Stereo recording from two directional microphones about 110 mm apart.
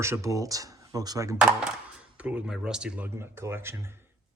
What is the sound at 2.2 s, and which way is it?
Speech, 10° right (ahead or behind).